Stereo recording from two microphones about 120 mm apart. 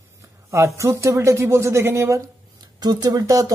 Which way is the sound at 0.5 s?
25° right (ahead or behind).